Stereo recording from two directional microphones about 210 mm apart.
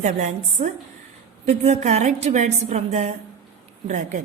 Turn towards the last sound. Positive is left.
turn(degrees=-35)  # may be behind; listen again after turning